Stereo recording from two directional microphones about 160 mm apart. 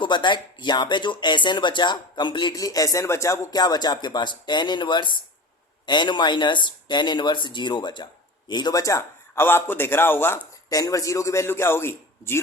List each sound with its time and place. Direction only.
0.0 s speech: 30° left (ahead or behind)